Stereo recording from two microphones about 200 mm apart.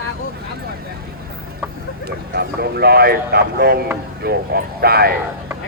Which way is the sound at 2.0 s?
55° right (ahead or behind).